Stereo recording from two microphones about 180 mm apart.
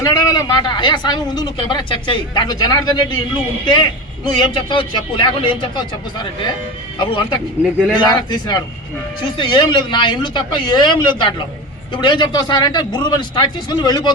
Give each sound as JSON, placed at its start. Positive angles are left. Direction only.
{"t": 0.0, "sound": "speech", "side_deg": 20}
{"t": 4.3, "sound": "speech", "side_deg": 25}
{"t": 7.6, "sound": "speech", "side_deg": -5}
{"t": 7.9, "sound": "speech", "side_deg": 25}